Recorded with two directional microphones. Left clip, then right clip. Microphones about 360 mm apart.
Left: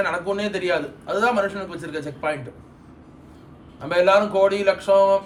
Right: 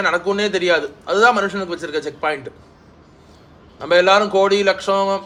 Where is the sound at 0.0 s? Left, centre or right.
Centre.